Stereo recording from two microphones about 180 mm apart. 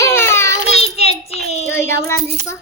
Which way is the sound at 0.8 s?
35° left (ahead or behind).